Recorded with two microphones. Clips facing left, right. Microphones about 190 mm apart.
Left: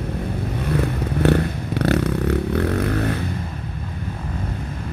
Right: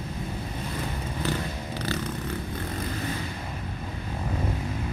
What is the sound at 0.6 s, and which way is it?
Vehicle, 65° left (ahead or behind).